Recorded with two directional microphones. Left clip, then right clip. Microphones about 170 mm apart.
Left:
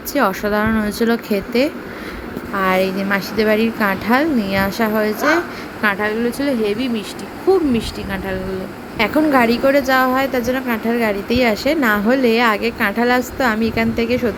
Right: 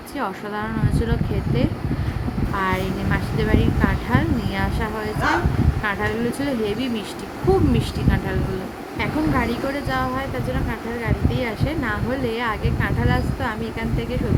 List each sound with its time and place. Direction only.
0.1 s a woman's voice: 25° left (ahead or behind)